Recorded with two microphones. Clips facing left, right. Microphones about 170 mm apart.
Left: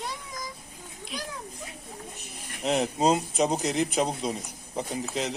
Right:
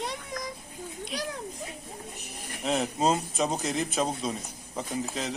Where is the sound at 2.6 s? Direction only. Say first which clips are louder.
Left 2 dB; 20° left (ahead or behind).